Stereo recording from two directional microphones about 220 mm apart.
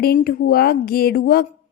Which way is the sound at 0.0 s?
45° left (ahead or behind).